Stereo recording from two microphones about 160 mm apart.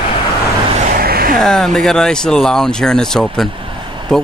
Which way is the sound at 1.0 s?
70° right (ahead or behind).